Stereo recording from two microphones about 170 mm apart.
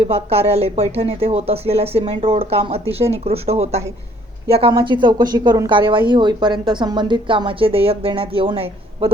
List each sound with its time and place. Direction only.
0.0 s speech: 35° right (ahead or behind)